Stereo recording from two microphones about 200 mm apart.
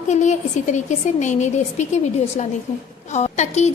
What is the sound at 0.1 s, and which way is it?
A woman's voice, 35° left (ahead or behind).